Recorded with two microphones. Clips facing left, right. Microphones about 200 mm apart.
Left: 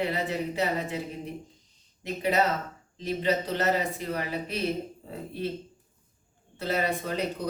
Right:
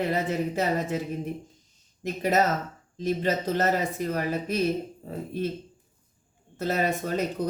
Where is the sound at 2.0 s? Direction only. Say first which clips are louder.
Right 2 dB; 45° right (ahead or behind).